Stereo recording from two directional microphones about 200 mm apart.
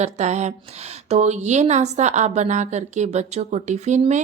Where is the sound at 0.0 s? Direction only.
35° right (ahead or behind).